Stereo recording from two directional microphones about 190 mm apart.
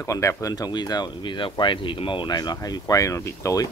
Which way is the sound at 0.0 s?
15° left (ahead or behind).